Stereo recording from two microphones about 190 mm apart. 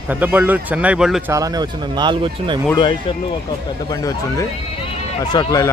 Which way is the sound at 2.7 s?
25° left (ahead or behind).